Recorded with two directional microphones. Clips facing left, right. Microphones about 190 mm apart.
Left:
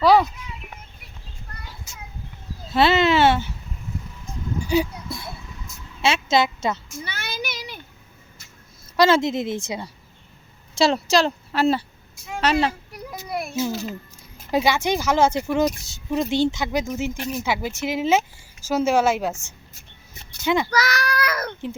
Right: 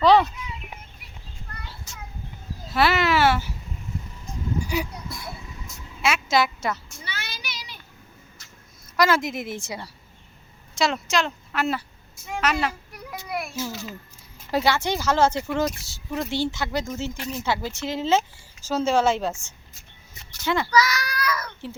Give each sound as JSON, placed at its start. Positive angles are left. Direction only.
{"t": 0.0, "sound": "a child's voice", "side_deg": 10}
{"t": 2.7, "sound": "a woman's voice", "side_deg": 25}
{"t": 4.7, "sound": "a sound", "side_deg": 25}
{"t": 6.0, "sound": "a woman's voice", "side_deg": 25}
{"t": 7.0, "sound": "child singing", "side_deg": 50}
{"t": 9.0, "sound": "a woman's voice", "side_deg": 25}
{"t": 10.8, "sound": "a child's voice", "side_deg": 30}
{"t": 12.1, "sound": "a sound", "side_deg": 10}
{"t": 12.4, "sound": "a woman's voice", "side_deg": 30}
{"t": 13.5, "sound": "a woman's voice", "side_deg": 20}
{"t": 20.4, "sound": "speech", "side_deg": 15}
{"t": 20.7, "sound": "a child's voice", "side_deg": 55}